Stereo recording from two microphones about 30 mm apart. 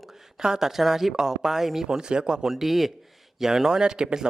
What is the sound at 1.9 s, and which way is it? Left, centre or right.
Speech, right.